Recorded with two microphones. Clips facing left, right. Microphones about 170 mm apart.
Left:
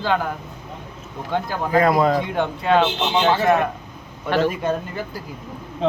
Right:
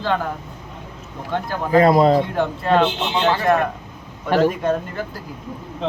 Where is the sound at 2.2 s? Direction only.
Centre (ahead or behind).